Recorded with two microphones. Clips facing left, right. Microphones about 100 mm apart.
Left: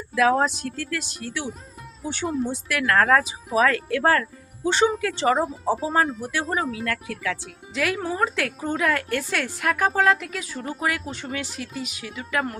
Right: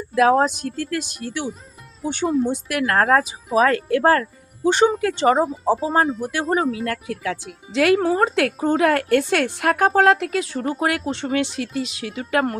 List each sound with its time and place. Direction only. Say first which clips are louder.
0.2 s speech: right 4 dB; 35° right (ahead or behind)
0.6 s a woman's voice: right 4 dB; 50° right (ahead or behind)
2.2 s speech: right 6 dB; centre (ahead or behind)
2.6 s a woman's voice: left 1 dB; 40° right (ahead or behind)
5.4 s speech: right 4 dB; centre (ahead or behind)
6.5 s speech: right 7 dB; 40° right (ahead or behind)
7.9 s a woman's voice: right 7 dB; 50° right (ahead or behind); by 9.6 s 65° right (ahead or behind)
9.7 s a woman's voice: right 5 dB; 55° right (ahead or behind)
11.5 s a woman's voice: right 7 dB; 80° right; by 12.5 s 55° right (ahead or behind)